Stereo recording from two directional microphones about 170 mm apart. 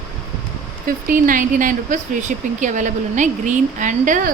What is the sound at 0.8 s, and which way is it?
Speech, 55° right (ahead or behind).